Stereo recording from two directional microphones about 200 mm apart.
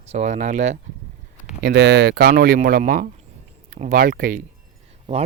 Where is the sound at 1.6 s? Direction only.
55° right (ahead or behind).